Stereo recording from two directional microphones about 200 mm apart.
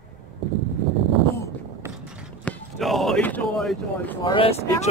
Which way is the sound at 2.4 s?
5° left (ahead or behind).